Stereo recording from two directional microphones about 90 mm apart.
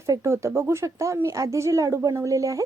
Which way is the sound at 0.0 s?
35° right (ahead or behind).